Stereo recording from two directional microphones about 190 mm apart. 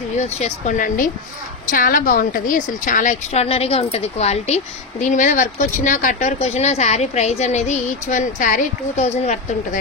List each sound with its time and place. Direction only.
0.2 s speech: 40° left (ahead or behind)